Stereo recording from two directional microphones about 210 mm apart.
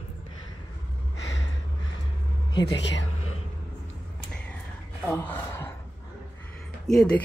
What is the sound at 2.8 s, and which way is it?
Speech, 60° left (ahead or behind).